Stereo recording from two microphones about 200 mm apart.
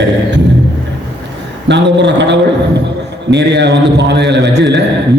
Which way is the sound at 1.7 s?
60° right (ahead or behind).